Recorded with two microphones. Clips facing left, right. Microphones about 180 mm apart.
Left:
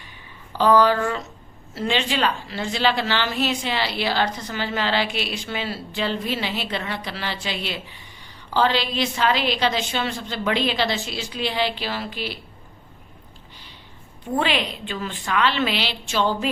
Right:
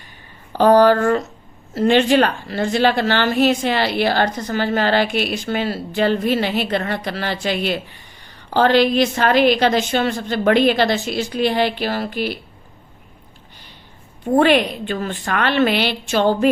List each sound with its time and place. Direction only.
0.5 s a woman's voice: 50° right (ahead or behind)
14.3 s a woman's voice: 50° right (ahead or behind)